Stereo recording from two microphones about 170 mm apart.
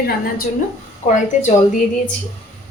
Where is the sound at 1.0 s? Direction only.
45° left (ahead or behind).